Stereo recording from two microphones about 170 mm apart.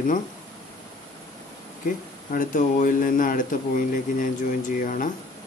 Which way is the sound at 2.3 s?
50° left (ahead or behind).